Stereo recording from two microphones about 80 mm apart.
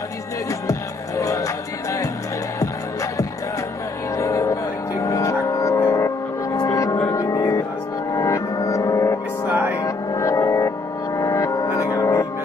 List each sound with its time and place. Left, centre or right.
0.5 s music: left
6.5 s gong: left
7.1 s music: left
8.1 s gong: left
9.5 s music: right
9.8 s music: left
11.1 s gong: left